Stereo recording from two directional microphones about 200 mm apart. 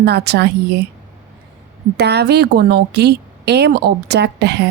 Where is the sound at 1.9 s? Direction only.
55° right (ahead or behind).